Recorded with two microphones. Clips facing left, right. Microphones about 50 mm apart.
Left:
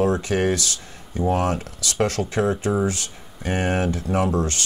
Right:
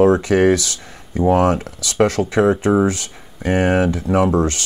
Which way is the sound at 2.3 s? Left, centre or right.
Right.